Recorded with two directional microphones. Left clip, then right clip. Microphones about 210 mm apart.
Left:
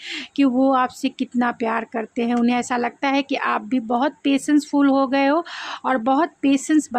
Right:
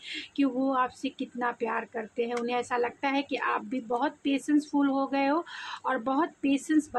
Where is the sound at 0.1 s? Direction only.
45° left (ahead or behind).